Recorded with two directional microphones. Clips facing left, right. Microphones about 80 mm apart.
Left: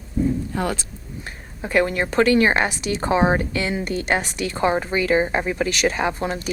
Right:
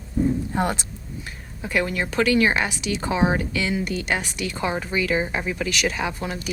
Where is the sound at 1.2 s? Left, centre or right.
Left.